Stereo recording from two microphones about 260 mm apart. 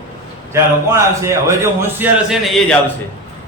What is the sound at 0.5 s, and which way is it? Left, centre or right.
A man's voice, centre.